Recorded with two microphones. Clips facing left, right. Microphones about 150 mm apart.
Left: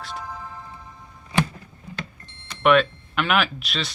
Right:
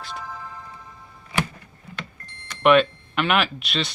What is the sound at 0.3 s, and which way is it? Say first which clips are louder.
Music: left 1 dB; 15° left (ahead or behind).